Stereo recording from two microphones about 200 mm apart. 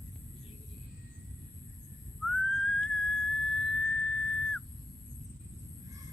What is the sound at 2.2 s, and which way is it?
Whistling, centre (ahead or behind).